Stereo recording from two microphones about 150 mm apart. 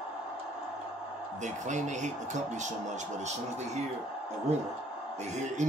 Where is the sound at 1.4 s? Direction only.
55° right (ahead or behind).